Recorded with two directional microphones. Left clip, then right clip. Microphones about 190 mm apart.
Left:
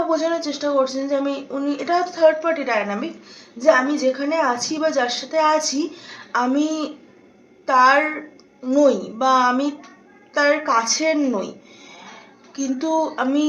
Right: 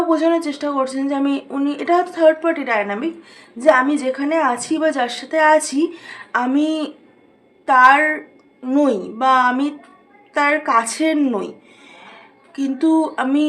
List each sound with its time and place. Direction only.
0.1 s a woman's voice: 35° right (ahead or behind)
12.5 s speech: 35° right (ahead or behind)